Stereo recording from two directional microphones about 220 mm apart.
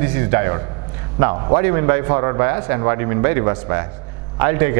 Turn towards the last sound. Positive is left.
turn(degrees=-15)  # may be behind; listen again after turning